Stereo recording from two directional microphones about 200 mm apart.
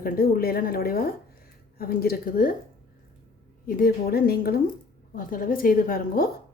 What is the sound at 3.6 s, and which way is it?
A woman's voice, 45° left (ahead or behind).